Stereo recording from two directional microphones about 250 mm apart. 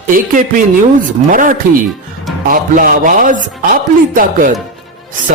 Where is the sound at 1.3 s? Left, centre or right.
Right.